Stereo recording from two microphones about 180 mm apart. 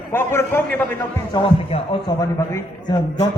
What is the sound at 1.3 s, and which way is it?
Speech, 30° left (ahead or behind).